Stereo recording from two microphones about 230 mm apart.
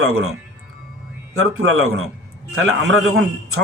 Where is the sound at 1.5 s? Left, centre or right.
Right.